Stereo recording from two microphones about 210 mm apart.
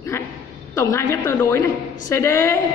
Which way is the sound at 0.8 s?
15° left (ahead or behind).